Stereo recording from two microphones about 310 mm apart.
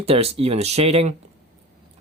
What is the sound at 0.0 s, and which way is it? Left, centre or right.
Speech, centre.